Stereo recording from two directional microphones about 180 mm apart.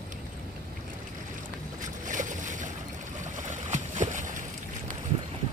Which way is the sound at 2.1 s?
45° right (ahead or behind).